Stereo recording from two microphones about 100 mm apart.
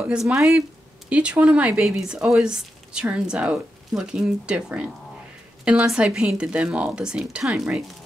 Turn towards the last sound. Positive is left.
turn(degrees=-5)  # may be behind; listen again after turning